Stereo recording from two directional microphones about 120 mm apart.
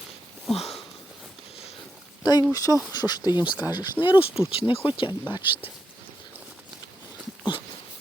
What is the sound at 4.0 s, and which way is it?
Speech, 10° left (ahead or behind).